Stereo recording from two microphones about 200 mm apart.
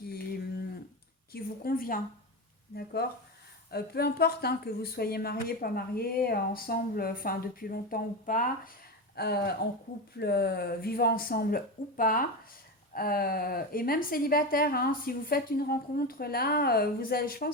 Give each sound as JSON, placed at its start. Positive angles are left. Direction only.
{"t": 1.3, "sound": "a sound", "side_deg": 45}
{"t": 2.7, "sound": "a woman's voice", "side_deg": 55}
{"t": 9.1, "sound": "a woman's voice", "side_deg": 55}